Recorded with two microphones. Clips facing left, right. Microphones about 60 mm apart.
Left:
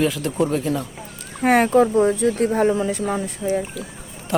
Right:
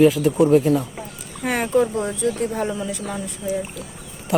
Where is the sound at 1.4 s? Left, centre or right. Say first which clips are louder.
Left 5 dB; left.